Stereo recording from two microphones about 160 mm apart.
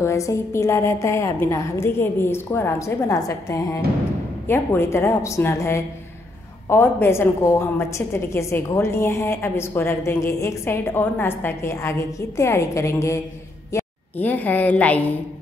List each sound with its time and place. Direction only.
0.0 s a woman's voice: 20° left (ahead or behind)